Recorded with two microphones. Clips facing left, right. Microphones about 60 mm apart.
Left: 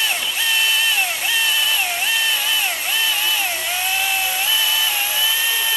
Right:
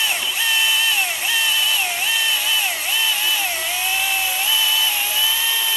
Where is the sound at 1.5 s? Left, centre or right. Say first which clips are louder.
Left 1 dB; centre.